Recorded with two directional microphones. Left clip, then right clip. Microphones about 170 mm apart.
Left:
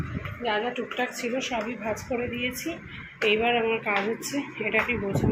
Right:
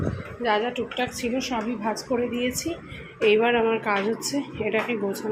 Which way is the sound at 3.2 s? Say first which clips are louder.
Right 3 dB; 25° right (ahead or behind).